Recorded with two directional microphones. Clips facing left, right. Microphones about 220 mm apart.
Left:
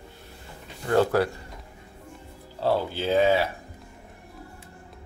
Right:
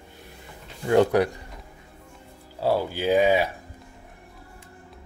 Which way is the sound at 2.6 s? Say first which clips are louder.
Right 1 dB; 10° right (ahead or behind).